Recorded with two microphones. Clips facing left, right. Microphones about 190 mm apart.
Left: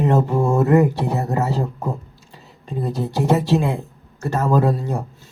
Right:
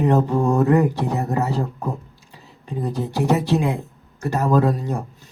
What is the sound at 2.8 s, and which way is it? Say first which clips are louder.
Speech: left 1 dB; 15° left (ahead or behind).